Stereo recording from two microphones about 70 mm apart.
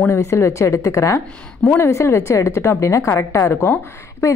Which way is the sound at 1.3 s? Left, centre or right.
Centre.